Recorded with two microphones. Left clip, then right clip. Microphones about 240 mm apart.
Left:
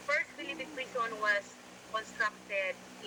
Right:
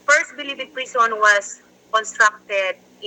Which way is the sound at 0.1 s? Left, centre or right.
Right.